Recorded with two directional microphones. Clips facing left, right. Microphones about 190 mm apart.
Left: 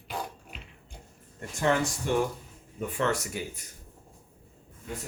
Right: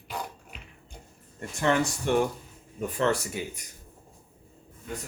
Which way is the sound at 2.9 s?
35° right (ahead or behind).